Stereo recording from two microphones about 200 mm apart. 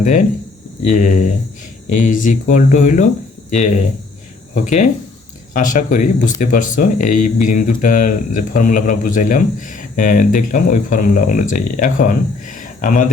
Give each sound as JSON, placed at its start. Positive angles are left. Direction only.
{"t": 0.0, "sound": "speech", "side_deg": 40}
{"t": 4.6, "sound": "speech", "side_deg": 40}